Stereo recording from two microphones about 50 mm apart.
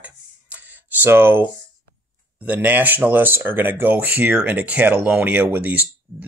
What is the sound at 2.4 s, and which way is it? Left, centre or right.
Speech, right.